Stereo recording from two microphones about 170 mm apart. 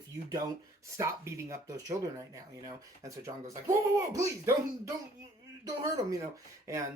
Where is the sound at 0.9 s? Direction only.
15° right (ahead or behind).